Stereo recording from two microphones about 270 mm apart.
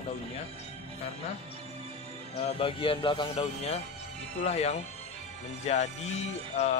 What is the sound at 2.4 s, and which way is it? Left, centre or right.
A man's voice, centre.